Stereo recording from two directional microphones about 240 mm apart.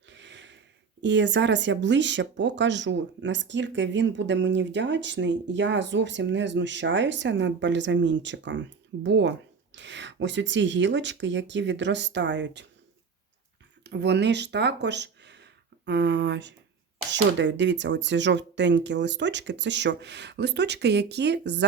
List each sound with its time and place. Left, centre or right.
0.1 s a sound: right
1.0 s speech: right
13.8 s speech: right